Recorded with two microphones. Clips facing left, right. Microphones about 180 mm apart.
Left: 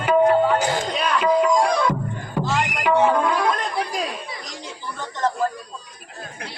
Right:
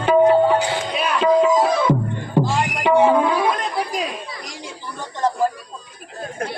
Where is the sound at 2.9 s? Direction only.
10° right (ahead or behind).